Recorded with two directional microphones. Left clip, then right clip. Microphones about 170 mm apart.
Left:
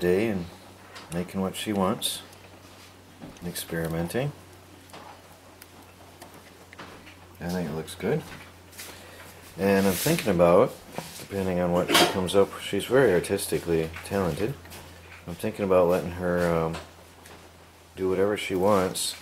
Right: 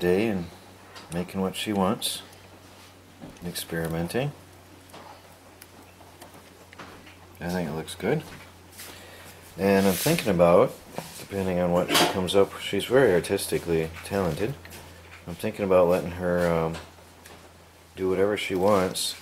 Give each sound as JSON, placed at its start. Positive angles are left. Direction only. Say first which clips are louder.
{"t": 0.0, "sound": "speech", "louder": "even", "side_deg": 0}
{"t": 3.3, "sound": "speech", "louder": "right 1 dB", "side_deg": 0}
{"t": 7.3, "sound": "speech", "louder": "right 1 dB", "side_deg": 0}
{"t": 9.6, "sound": "speech", "louder": "right 1 dB", "side_deg": 0}
{"t": 17.9, "sound": "speech", "louder": "right 1 dB", "side_deg": 0}